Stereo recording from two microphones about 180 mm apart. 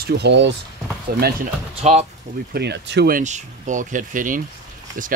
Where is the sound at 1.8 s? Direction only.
40° right (ahead or behind).